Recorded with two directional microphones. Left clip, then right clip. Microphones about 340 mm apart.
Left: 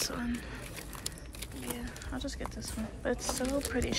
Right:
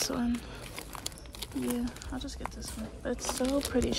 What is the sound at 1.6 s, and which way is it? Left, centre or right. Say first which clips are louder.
Speech: right 7 dB; centre.